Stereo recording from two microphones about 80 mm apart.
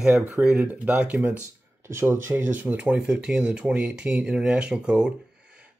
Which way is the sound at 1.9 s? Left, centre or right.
Right.